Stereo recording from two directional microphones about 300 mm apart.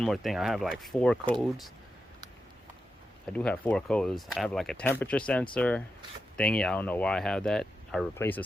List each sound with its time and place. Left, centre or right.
0.0 s speech: centre
3.3 s speech: centre